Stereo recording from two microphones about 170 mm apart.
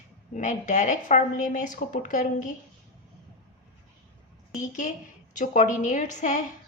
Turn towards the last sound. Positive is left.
turn(degrees=50)  # may be behind; listen again after turning